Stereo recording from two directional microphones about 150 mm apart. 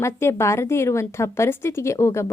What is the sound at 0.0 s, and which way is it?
A woman's voice, 15° left (ahead or behind).